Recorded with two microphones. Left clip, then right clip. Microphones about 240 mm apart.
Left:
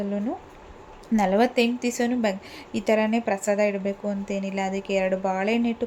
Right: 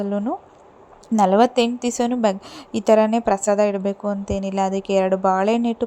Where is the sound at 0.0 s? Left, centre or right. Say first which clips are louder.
Right 5 dB; right.